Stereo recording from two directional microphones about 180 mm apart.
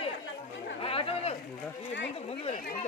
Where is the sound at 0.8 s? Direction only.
35° left (ahead or behind).